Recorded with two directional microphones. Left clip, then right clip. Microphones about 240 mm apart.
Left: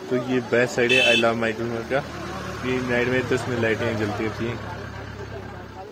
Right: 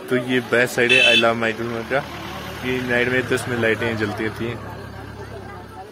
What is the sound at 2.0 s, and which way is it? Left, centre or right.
Vehicle, left.